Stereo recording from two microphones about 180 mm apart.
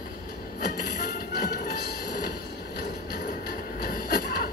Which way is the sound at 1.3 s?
60° left (ahead or behind).